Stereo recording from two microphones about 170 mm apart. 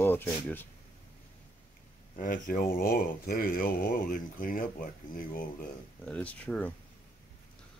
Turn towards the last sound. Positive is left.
turn(degrees=10)  # may be behind; listen again after turning